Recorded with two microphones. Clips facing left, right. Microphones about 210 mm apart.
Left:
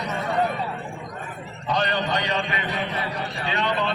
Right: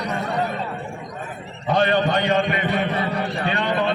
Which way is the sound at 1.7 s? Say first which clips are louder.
Right 6 dB; 55° right (ahead or behind).